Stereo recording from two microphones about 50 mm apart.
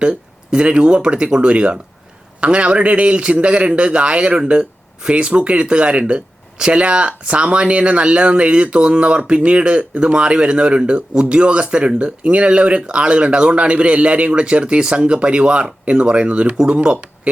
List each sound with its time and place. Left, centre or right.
0.0 s speech: right